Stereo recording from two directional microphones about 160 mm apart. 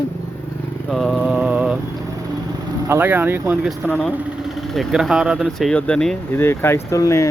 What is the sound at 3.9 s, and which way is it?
Speech, 10° left (ahead or behind).